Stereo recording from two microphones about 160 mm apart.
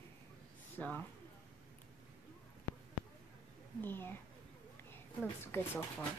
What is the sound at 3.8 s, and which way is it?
Speech, 15° left (ahead or behind).